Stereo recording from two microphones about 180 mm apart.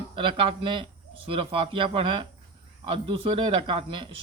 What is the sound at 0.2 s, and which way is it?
A man's voice, 25° right (ahead or behind).